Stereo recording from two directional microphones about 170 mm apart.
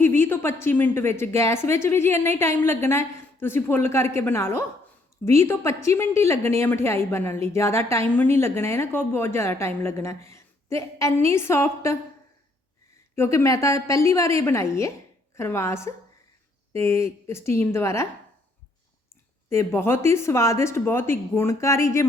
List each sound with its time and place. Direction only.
0.0 s a woman's voice: 15° left (ahead or behind)
13.1 s a woman's voice: 15° left (ahead or behind)
19.5 s a woman's voice: 15° left (ahead or behind)